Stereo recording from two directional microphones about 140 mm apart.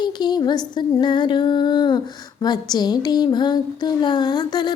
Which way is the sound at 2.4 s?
30° left (ahead or behind).